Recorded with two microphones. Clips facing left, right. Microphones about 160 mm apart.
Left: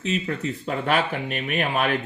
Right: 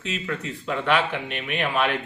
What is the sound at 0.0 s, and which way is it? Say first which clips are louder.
A man's voice: left 4 dB; 40° left (ahead or behind).